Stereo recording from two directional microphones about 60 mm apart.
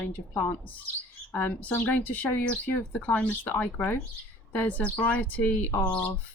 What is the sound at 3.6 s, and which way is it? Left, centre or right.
Speech, left.